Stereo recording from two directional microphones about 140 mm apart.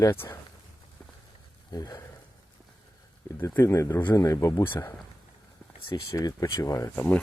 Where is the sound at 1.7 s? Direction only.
30° left (ahead or behind).